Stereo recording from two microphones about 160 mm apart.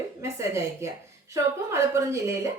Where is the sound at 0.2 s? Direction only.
15° right (ahead or behind).